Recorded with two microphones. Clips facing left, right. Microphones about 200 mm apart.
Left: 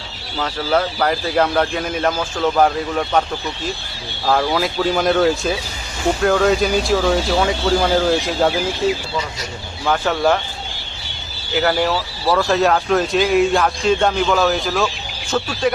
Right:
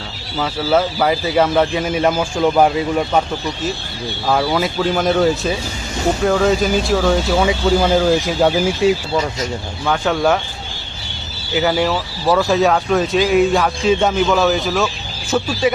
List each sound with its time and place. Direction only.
0.3 s a man's voice: 5° right (ahead or behind)
4.3 s a man's voice: 5° right (ahead or behind)
8.8 s a man's voice: 15° right (ahead or behind)
9.8 s a man's voice: 5° left (ahead or behind)
11.6 s a man's voice: centre (ahead or behind)